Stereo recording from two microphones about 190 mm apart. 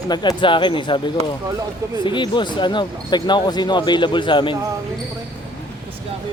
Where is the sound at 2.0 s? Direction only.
25° left (ahead or behind).